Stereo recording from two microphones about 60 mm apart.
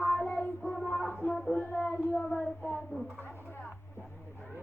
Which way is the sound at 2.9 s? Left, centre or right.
Left.